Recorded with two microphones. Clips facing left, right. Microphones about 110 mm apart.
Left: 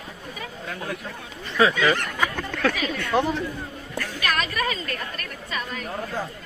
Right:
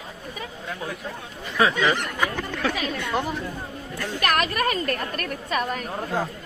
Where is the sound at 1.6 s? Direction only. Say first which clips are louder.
Left 1 dB; 15° right (ahead or behind).